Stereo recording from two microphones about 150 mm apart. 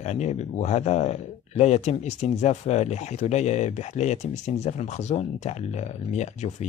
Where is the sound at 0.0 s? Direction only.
50° left (ahead or behind).